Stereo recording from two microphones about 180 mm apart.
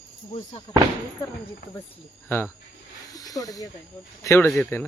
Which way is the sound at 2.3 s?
15° left (ahead or behind).